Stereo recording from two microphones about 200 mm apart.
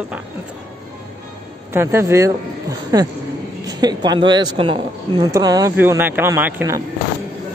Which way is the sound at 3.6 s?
20° right (ahead or behind).